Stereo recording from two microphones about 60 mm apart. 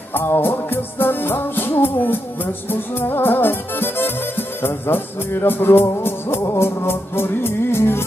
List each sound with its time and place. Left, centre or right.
0.1 s music: left